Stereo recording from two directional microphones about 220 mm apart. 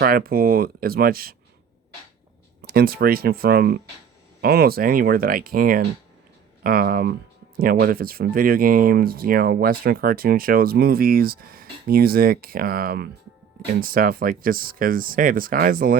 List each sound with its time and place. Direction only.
0.0 s speech: 45° right (ahead or behind)
2.6 s speech: 45° right (ahead or behind)